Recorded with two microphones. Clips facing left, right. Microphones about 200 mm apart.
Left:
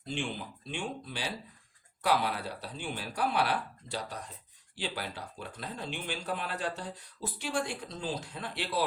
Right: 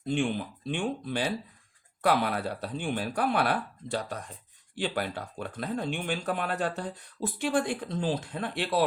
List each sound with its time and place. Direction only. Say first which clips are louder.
0.0 s speech: right 8 dB; 55° right (ahead or behind)